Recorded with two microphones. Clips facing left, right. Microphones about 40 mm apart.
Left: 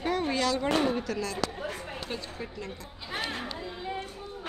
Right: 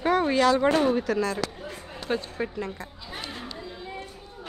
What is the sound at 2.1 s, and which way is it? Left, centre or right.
Speech, right.